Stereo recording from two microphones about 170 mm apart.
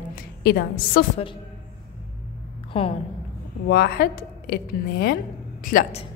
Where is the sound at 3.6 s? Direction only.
70° left (ahead or behind).